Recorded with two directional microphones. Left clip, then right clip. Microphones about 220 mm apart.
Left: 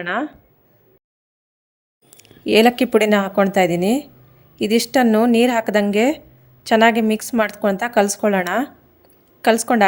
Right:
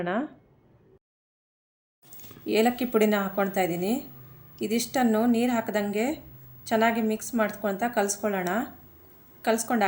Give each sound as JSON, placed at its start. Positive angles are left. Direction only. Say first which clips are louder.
{"t": 0.0, "sound": "speech", "louder": "left 7 dB", "side_deg": 55}
{"t": 2.5, "sound": "speech", "louder": "left 10 dB", "side_deg": 50}